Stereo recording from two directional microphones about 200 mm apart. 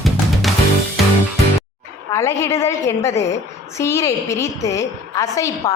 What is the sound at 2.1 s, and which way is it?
A woman's voice, 15° left (ahead or behind).